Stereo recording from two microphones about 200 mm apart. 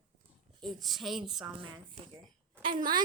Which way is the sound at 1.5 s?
25° right (ahead or behind).